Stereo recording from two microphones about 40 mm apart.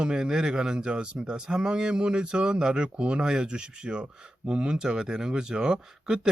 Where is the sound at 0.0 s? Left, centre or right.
Centre.